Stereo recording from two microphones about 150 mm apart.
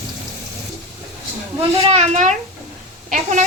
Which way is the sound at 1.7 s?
45° right (ahead or behind).